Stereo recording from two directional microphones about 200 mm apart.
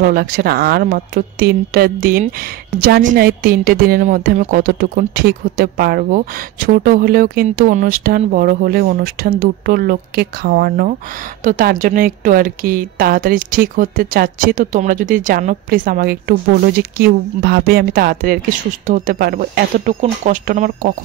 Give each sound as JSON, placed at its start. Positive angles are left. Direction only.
{"t": 0.0, "sound": "speech", "side_deg": -50}